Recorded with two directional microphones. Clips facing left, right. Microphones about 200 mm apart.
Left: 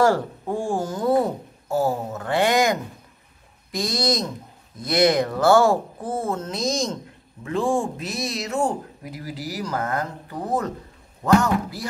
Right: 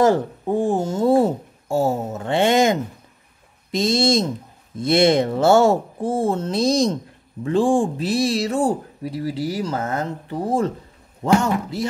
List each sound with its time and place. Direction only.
0.0 s speech: 20° right (ahead or behind)